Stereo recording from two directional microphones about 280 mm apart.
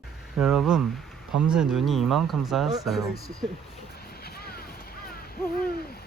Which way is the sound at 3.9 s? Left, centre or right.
Left.